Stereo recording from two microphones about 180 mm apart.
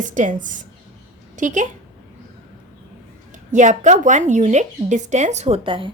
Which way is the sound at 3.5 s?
40° right (ahead or behind).